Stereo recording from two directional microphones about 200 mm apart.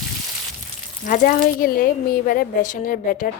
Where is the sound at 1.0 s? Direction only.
45° left (ahead or behind).